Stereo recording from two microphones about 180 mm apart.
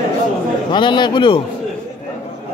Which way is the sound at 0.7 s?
25° left (ahead or behind).